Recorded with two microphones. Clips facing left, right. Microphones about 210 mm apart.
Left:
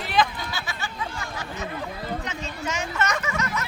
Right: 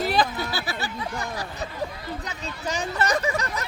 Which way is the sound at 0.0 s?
40° right (ahead or behind).